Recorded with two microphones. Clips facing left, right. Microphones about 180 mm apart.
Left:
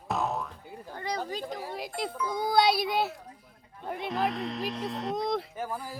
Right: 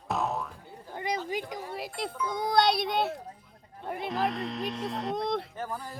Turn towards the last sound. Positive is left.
turn(degrees=10)  # may be behind; listen again after turning